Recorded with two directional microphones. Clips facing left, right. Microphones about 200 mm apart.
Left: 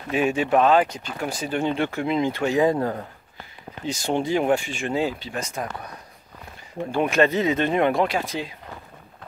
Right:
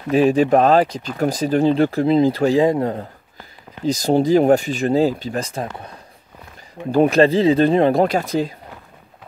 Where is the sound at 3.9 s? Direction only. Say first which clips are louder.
Right 8 dB; 35° right (ahead or behind).